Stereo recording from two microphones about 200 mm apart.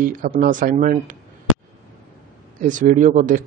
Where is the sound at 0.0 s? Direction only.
45° right (ahead or behind).